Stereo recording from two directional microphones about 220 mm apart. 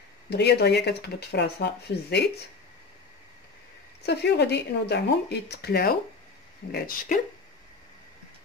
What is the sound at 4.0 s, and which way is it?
Speech, 50° left (ahead or behind).